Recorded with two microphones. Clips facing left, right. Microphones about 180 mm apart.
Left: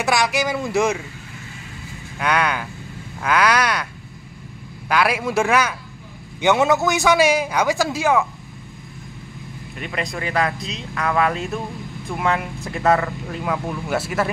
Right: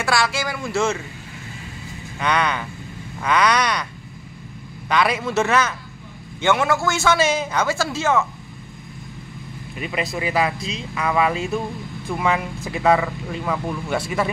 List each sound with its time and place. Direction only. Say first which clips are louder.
0.0 s speech: left 2 dB; 20° left (ahead or behind)
2.1 s a man's voice: left 1 dB; 5° left (ahead or behind)
4.8 s a man's voice: left 1 dB; 5° left (ahead or behind)
9.8 s speech: right 2 dB; 5° right (ahead or behind)